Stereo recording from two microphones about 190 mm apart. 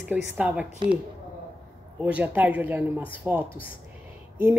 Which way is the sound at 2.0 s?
10° right (ahead or behind).